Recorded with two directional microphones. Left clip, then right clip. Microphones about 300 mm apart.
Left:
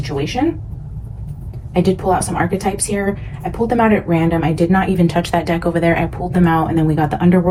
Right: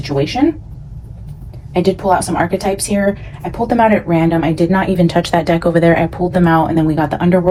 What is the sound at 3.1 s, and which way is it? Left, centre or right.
Speech, right.